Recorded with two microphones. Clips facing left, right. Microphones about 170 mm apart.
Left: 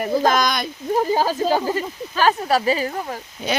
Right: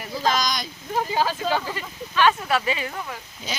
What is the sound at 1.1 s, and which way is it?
Speech, 40° left (ahead or behind).